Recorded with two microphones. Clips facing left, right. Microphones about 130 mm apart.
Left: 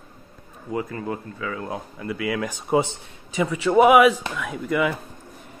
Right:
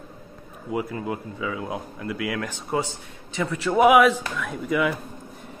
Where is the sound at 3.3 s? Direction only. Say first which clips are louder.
Left 4 dB; 10° left (ahead or behind).